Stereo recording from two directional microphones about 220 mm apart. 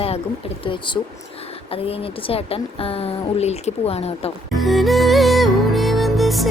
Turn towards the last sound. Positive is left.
turn(degrees=0)  # may be behind; listen again after turning